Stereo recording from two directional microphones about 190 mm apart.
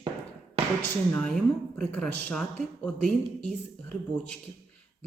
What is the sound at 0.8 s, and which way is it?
Speech, 5° left (ahead or behind).